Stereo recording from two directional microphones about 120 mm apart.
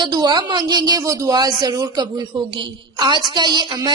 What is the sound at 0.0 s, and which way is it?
A woman's voice, 35° right (ahead or behind).